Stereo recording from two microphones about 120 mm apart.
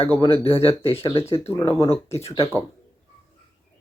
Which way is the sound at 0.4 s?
50° left (ahead or behind).